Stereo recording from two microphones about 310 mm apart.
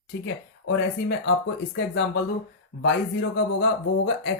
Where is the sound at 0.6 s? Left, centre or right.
Left.